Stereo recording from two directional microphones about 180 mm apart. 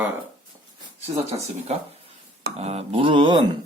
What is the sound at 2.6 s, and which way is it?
Mantra, 35° right (ahead or behind).